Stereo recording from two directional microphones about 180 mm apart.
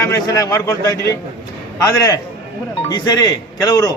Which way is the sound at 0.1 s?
20° left (ahead or behind).